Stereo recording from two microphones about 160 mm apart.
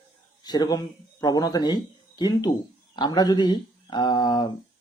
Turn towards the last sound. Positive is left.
turn(degrees=30)  # may be behind; listen again after turning